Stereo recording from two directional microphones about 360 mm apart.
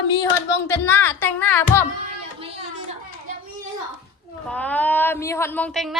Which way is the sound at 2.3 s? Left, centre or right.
Centre.